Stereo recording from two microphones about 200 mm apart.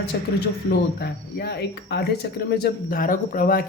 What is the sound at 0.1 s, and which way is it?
Speech, 55° left (ahead or behind).